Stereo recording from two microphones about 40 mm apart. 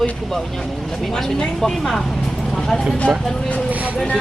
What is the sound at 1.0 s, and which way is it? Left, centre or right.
Speech, centre.